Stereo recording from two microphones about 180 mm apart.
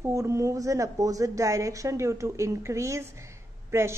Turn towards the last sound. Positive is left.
turn(degrees=-15)  # may be behind; listen again after turning